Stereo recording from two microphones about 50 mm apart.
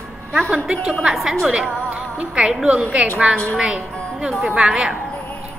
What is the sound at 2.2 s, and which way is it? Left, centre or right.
Speech, right.